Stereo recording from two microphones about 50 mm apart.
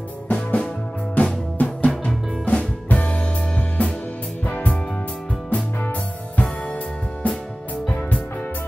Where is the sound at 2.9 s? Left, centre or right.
Left.